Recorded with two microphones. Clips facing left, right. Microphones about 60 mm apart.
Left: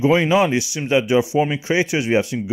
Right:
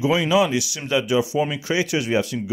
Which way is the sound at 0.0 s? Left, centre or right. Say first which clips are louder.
Left 3 dB; left.